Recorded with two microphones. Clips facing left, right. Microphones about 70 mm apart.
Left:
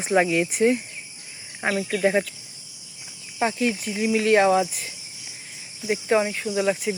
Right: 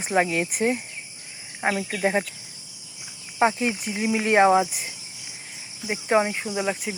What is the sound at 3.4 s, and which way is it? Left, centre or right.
Speech, right.